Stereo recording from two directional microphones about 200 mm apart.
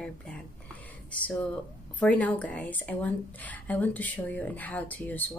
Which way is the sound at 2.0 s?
5° left (ahead or behind).